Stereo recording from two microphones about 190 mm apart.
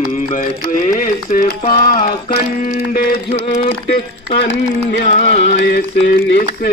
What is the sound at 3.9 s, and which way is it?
Speech, 60° left (ahead or behind).